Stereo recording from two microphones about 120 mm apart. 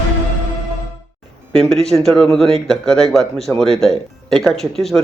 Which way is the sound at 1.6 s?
5° left (ahead or behind).